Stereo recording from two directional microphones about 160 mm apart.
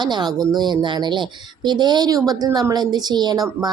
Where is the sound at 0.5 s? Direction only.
25° right (ahead or behind).